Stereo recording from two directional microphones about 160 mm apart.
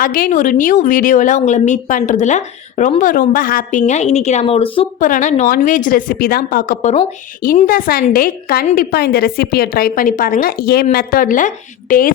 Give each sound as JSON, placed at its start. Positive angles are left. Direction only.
{"t": 0.0, "sound": "a woman's voice", "side_deg": 60}
{"t": 4.9, "sound": "a woman's voice", "side_deg": 55}
{"t": 6.8, "sound": "speech", "side_deg": 35}
{"t": 7.4, "sound": "a woman's voice", "side_deg": 60}
{"t": 10.9, "sound": "a woman's voice", "side_deg": 60}